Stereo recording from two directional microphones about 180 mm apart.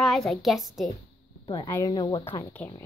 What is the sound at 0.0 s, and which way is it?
Speech, centre (ahead or behind).